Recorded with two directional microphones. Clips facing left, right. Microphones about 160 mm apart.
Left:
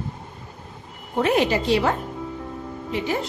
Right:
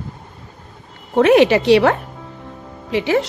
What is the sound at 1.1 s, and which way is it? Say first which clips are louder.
A woman's voice: right 9 dB; 80° right.